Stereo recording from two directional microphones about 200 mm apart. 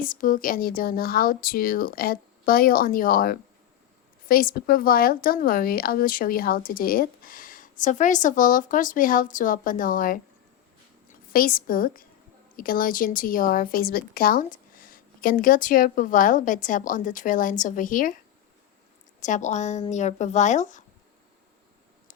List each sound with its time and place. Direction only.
0.0 s a woman's voice: 45° left (ahead or behind)
19.2 s speech: 35° left (ahead or behind)